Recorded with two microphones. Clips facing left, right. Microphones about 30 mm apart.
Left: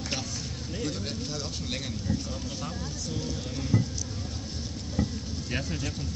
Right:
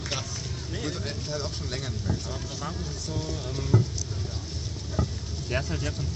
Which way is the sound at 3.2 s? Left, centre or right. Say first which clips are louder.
Right 2 dB; right.